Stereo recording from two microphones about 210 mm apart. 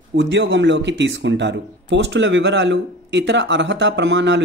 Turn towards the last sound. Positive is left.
turn(degrees=-60)  # may be behind; listen again after turning